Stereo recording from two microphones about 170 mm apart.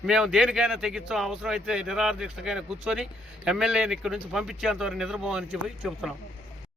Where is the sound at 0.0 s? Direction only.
5° right (ahead or behind).